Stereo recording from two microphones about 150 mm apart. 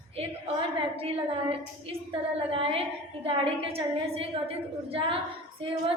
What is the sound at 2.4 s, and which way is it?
A woman's voice, 40° right (ahead or behind).